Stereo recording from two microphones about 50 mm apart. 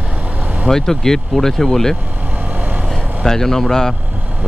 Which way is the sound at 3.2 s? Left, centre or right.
Centre.